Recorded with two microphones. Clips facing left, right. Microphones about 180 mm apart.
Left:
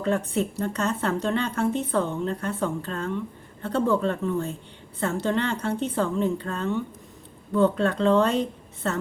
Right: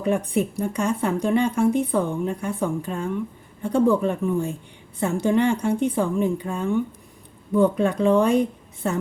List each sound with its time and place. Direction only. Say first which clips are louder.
0.0 s speech: right 3 dB; 15° right (ahead or behind)